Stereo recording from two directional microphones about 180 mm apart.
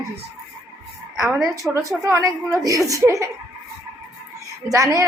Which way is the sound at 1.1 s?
5° right (ahead or behind).